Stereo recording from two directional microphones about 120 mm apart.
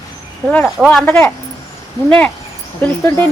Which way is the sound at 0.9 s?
15° left (ahead or behind).